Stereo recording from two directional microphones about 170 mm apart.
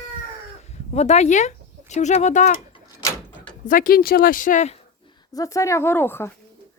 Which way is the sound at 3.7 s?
55° left (ahead or behind).